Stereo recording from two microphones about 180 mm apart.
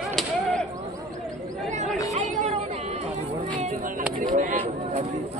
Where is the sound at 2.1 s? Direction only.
35° right (ahead or behind).